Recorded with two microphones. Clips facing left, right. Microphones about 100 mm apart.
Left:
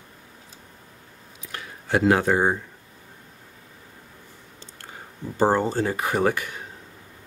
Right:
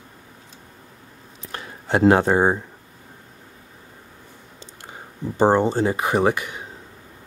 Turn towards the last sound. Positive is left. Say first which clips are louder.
# right 3 dB
turn(degrees=-20)  # may be behind; listen again after turning